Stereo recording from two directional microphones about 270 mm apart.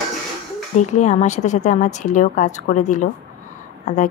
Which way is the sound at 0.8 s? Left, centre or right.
Left.